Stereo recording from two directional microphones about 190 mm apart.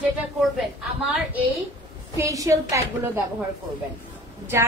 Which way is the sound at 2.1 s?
15° right (ahead or behind).